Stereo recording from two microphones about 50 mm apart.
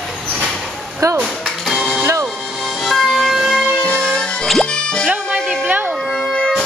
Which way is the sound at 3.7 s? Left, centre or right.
Left.